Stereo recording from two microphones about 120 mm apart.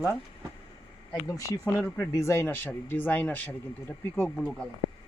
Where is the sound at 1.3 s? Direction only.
30° left (ahead or behind); by 4.6 s 10° left (ahead or behind).